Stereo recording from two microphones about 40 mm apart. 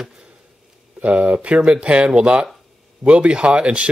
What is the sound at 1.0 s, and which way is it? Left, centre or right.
Speech, right.